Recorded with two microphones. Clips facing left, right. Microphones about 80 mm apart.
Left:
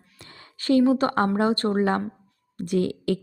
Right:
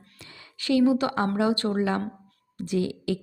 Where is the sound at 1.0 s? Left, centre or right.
Left.